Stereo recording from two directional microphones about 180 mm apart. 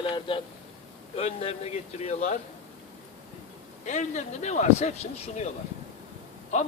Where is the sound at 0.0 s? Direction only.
30° left (ahead or behind).